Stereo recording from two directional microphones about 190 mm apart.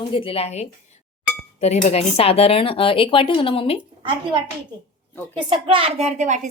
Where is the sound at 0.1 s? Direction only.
30° left (ahead or behind).